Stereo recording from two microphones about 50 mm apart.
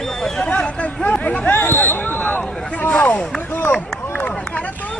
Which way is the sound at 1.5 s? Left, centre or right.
Left.